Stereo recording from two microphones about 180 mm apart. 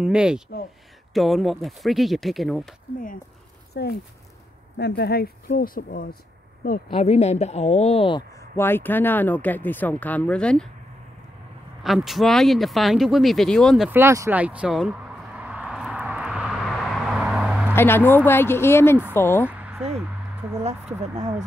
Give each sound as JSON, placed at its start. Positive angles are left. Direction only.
{"t": 0.0, "sound": "speech", "side_deg": -5}
{"t": 3.8, "sound": "speech", "side_deg": 65}
{"t": 6.9, "sound": "speech", "side_deg": 35}
{"t": 8.4, "sound": "speech", "side_deg": 10}
{"t": 11.8, "sound": "speech", "side_deg": 0}
{"t": 13.8, "sound": "a sound", "side_deg": -15}
{"t": 17.7, "sound": "speech", "side_deg": 10}
{"t": 19.4, "sound": "a sound", "side_deg": -10}
{"t": 20.6, "sound": "speech", "side_deg": -40}